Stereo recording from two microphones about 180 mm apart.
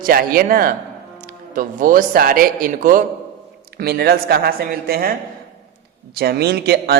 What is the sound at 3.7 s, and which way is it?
Speech, 60° right (ahead or behind).